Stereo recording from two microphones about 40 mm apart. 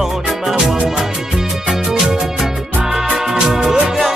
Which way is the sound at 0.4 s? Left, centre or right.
Centre.